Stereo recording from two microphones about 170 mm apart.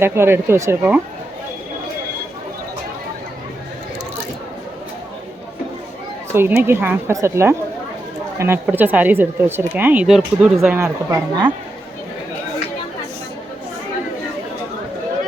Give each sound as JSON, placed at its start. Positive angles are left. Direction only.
{"t": 0.0, "sound": "speech", "side_deg": -15}
{"t": 6.3, "sound": "speech", "side_deg": -10}
{"t": 10.6, "sound": "speech", "side_deg": -15}